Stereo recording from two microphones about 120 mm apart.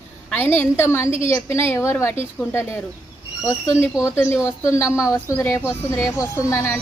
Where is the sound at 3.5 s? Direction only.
25° left (ahead or behind).